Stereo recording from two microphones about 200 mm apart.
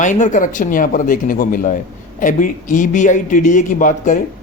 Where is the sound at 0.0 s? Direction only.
40° left (ahead or behind).